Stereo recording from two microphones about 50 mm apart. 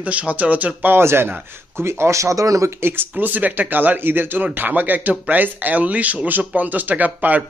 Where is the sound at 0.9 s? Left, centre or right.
Right.